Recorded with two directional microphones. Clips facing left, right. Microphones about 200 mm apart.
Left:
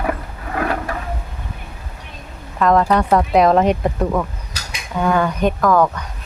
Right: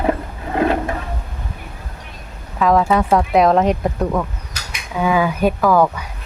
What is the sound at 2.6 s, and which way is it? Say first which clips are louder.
Speech: even; 5° right (ahead or behind).